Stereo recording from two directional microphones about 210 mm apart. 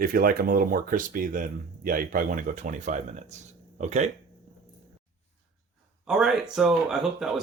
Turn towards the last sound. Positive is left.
turn(degrees=0)  # may be behind; listen again after turning